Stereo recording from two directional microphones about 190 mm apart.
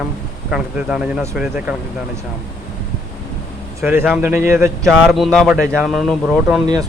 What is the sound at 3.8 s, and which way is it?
Speech, 10° right (ahead or behind).